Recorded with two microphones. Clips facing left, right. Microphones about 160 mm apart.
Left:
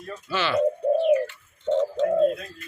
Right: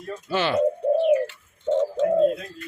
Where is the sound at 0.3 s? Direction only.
50° right (ahead or behind).